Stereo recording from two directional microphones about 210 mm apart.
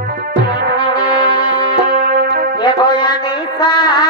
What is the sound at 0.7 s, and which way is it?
Brass instrument, 55° right (ahead or behind).